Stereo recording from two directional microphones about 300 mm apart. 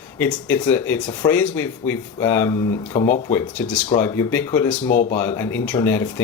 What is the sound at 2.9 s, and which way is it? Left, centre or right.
Speech, left.